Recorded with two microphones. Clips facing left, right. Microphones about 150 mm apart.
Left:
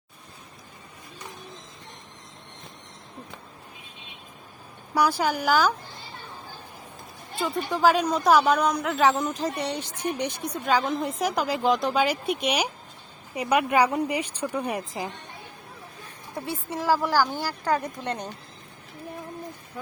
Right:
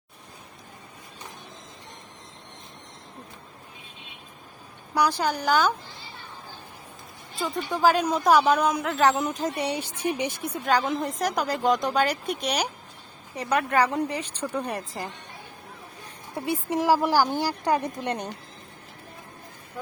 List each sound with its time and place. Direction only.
4.9 s a woman's voice: 5° left (ahead or behind)
7.7 s a woman's voice: centre (ahead or behind)
16.5 s speech: 15° right (ahead or behind)